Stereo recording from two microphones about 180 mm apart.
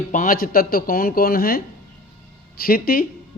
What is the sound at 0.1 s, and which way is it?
Speech, 50° left (ahead or behind).